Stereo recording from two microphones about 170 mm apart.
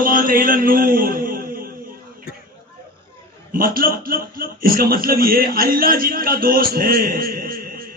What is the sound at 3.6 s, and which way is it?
A man's voice, 60° right (ahead or behind).